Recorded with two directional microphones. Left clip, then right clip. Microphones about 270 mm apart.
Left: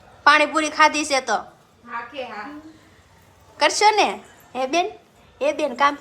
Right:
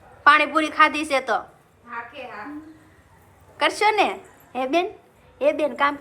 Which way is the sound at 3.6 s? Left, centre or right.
Centre.